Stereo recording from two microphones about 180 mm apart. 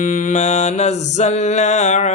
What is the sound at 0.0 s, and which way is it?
Speech, 40° left (ahead or behind).